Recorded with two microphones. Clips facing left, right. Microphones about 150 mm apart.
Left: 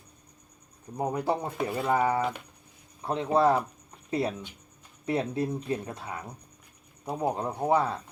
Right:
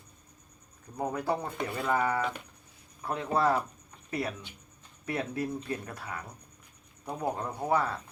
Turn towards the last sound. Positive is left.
turn(degrees=25)  # may be behind; listen again after turning